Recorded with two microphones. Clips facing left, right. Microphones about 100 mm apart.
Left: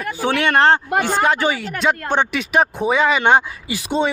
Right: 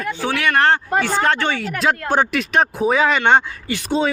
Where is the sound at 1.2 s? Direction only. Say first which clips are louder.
Left 1 dB; 10° left (ahead or behind).